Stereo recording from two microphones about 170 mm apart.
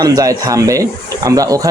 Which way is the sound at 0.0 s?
20° right (ahead or behind).